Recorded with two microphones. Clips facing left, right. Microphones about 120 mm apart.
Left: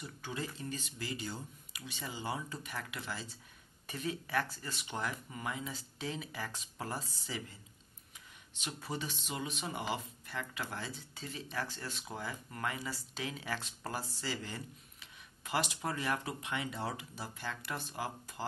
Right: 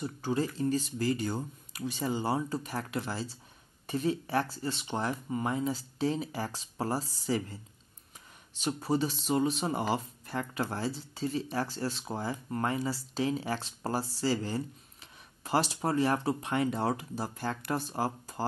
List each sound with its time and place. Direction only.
0.0 s speech: 35° right (ahead or behind)
8.5 s speech: 35° right (ahead or behind)